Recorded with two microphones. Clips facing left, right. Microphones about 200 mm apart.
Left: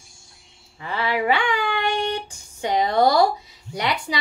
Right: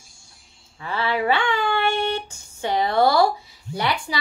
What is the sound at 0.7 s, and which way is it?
Speech, 15° left (ahead or behind).